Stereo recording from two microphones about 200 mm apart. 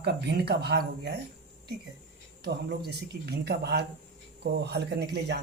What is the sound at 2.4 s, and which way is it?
Speech, 55° right (ahead or behind).